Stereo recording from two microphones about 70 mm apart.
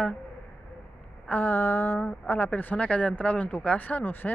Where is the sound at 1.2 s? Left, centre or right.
Left.